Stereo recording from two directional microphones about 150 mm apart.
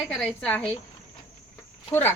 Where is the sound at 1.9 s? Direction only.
20° left (ahead or behind).